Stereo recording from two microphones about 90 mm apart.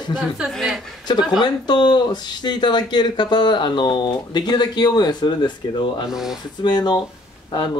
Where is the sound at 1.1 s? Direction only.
55° left (ahead or behind).